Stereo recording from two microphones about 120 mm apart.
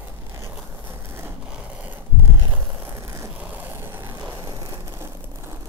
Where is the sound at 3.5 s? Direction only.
20° right (ahead or behind).